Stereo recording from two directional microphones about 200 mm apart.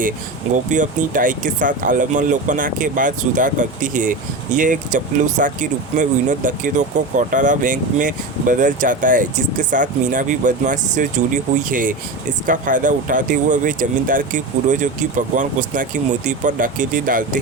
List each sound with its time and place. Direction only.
0.5 s speech: 40° right (ahead or behind)